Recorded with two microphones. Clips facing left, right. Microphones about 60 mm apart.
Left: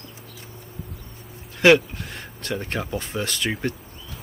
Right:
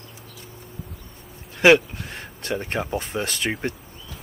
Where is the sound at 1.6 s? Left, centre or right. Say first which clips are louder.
Even; centre.